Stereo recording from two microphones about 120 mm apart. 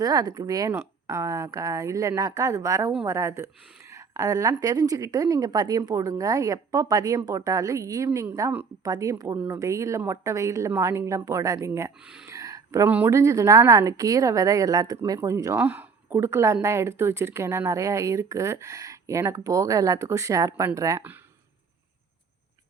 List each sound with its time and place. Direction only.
0.0 s speech: 35° right (ahead or behind)
12.0 s speech: 5° right (ahead or behind)
12.3 s a sound: 25° right (ahead or behind)
13.1 s speech: 25° right (ahead or behind)
15.6 s speech: 15° right (ahead or behind)